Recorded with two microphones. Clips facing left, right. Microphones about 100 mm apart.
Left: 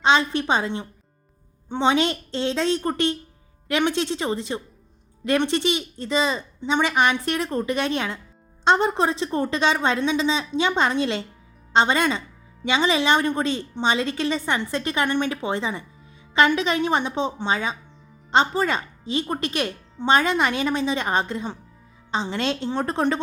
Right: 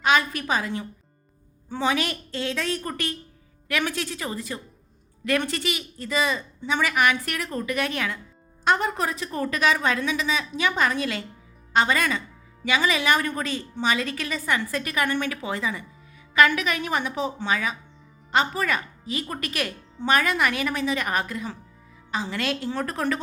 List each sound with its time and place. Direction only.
0.0 s a woman's voice: 25° left (ahead or behind)